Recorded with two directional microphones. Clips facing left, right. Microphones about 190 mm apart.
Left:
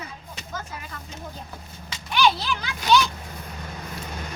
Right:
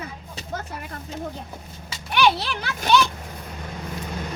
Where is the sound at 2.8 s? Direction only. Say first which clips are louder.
Right 1 dB; 55° right (ahead or behind).